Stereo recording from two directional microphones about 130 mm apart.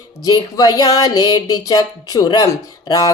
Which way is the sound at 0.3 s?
30° left (ahead or behind).